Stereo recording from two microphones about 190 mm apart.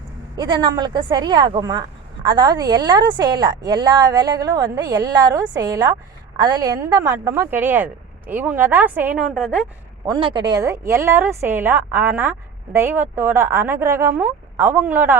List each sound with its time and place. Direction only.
0.3 s a woman's voice: 25° right (ahead or behind); by 9.6 s 5° right (ahead or behind)
10.1 s a woman's voice: 25° right (ahead or behind)